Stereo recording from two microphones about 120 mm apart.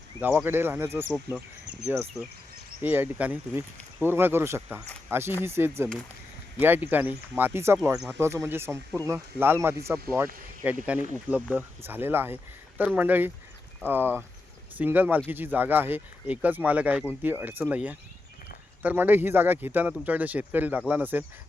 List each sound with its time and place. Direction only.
0.2 s speech: 15° right (ahead or behind)